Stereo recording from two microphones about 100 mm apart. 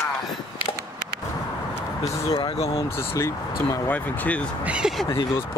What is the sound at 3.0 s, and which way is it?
Speech, 25° left (ahead or behind).